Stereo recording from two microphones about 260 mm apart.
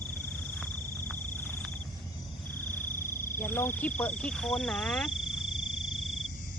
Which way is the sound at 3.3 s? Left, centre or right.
Centre.